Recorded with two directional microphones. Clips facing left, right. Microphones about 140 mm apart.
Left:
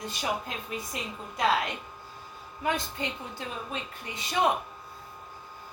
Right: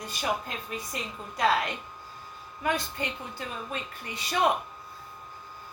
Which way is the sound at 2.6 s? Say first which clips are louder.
Right 1 dB; 20° left (ahead or behind).